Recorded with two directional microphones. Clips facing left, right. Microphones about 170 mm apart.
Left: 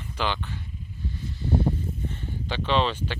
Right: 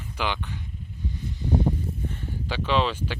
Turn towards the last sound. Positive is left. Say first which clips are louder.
# even
turn(degrees=-5)  # may be behind; listen again after turning